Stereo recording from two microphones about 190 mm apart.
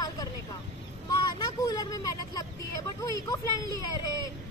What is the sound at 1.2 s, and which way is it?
Vehicle, 20° left (ahead or behind).